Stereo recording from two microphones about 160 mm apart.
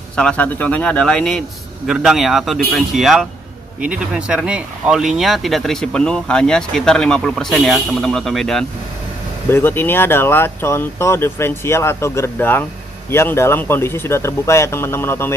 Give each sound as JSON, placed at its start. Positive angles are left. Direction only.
{"t": 0.1, "sound": "speech", "side_deg": 5}
{"t": 9.5, "sound": "speech", "side_deg": 15}